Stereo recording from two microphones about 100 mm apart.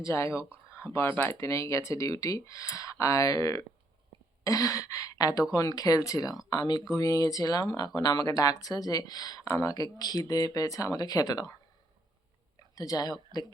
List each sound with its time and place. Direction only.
0.0 s speech: 30° left (ahead or behind)
12.7 s speech: 35° left (ahead or behind)